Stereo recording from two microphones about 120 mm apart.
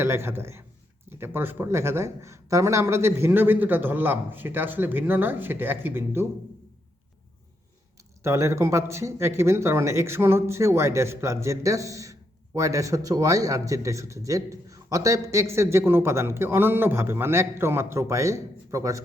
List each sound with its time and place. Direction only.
0.0 s a man's voice: 20° right (ahead or behind)
8.2 s a man's voice: 25° right (ahead or behind)